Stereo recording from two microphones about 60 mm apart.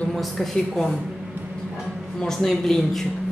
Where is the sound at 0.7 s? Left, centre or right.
Centre.